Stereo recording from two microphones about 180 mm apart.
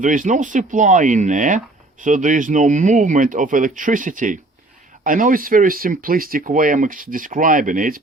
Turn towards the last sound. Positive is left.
turn(degrees=-50)  # may be behind; listen again after turning